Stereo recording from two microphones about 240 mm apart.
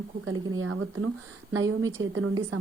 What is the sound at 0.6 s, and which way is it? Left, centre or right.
Speech, right.